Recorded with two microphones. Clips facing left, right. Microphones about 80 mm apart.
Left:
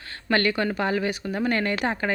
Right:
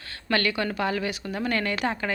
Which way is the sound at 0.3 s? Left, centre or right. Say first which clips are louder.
Left 3 dB; left.